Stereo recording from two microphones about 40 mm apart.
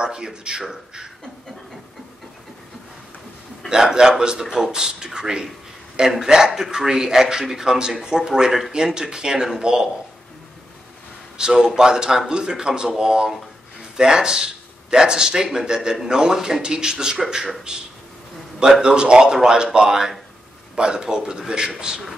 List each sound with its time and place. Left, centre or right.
0.0 s speech: right
3.6 s speech: centre
11.3 s speech: centre